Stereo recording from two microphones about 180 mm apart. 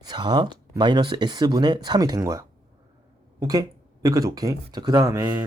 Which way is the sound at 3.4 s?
20° right (ahead or behind).